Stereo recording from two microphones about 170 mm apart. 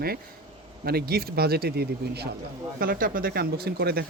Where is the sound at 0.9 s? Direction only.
65° right (ahead or behind).